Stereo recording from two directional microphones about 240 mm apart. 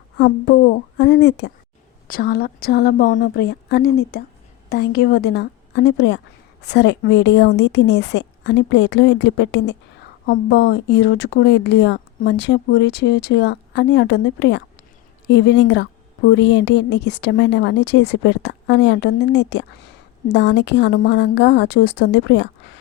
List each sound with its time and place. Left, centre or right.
0.2 s a woman's voice: left